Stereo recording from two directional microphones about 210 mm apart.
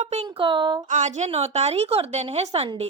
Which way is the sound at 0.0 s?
30° right (ahead or behind).